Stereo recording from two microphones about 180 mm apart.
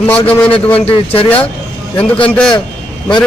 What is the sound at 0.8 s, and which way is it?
Speech, 30° left (ahead or behind).